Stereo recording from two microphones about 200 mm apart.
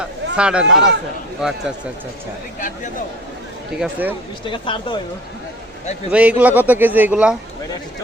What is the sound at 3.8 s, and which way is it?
Speech, 10° right (ahead or behind).